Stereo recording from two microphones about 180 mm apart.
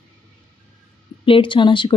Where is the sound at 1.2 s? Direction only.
30° left (ahead or behind).